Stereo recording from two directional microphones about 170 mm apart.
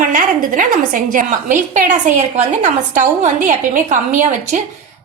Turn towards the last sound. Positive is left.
turn(degrees=-45)  # may be behind; listen again after turning